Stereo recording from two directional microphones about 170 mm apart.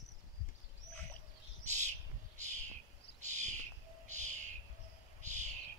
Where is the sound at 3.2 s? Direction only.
45° right (ahead or behind).